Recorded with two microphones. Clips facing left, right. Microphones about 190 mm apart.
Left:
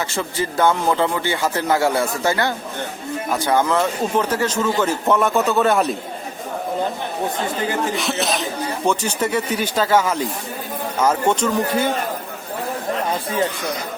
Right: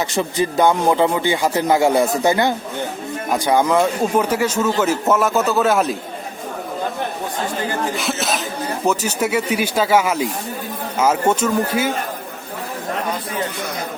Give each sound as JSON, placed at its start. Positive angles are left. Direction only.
{"t": 0.1, "sound": "speech", "side_deg": -15}
{"t": 7.9, "sound": "speech", "side_deg": 0}